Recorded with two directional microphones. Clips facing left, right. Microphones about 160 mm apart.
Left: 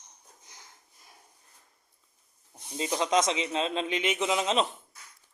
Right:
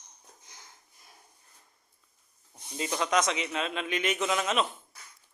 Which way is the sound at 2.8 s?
25° left (ahead or behind).